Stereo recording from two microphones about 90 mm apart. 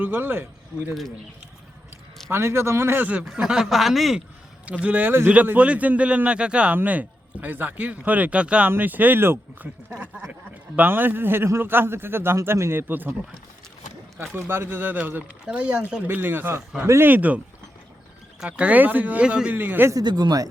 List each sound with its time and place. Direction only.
0.0 s a man's voice: 25° right (ahead or behind)
2.3 s a man's voice: 30° right (ahead or behind); by 4.2 s centre (ahead or behind)
4.6 s a man's voice: 15° right (ahead or behind)
14.3 s a man's voice: 25° right (ahead or behind)
18.4 s speech: 15° right (ahead or behind)
19.9 s speech: 45° right (ahead or behind)